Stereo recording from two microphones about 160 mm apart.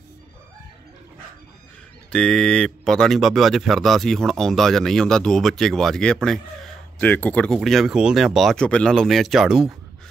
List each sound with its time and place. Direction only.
2.0 s speech: 5° left (ahead or behind)